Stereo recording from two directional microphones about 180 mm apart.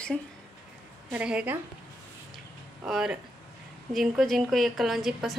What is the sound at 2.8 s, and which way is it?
A woman's voice, 5° right (ahead or behind).